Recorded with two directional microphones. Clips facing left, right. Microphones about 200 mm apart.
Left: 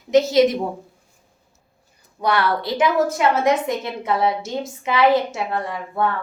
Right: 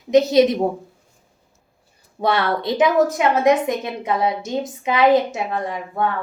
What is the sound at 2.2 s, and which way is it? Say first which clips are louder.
A woman's voice: right 1 dB; 25° right (ahead or behind).